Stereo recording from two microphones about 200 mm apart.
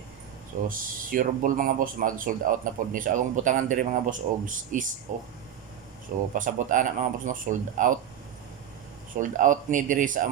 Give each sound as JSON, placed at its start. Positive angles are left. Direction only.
{"t": 0.7, "sound": "a man's voice", "side_deg": -45}
{"t": 6.3, "sound": "a man's voice", "side_deg": -40}
{"t": 9.1, "sound": "a man's voice", "side_deg": -40}